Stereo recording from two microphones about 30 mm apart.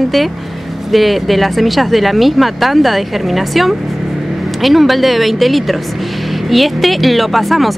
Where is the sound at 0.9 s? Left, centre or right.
Centre.